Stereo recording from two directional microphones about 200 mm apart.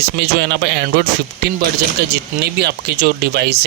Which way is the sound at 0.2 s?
60° right (ahead or behind).